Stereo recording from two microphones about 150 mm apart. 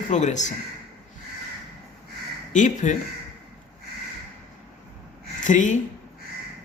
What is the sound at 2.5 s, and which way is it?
Speech, 55° left (ahead or behind).